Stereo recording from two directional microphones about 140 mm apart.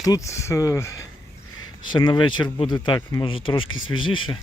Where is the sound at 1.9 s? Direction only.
35° left (ahead or behind).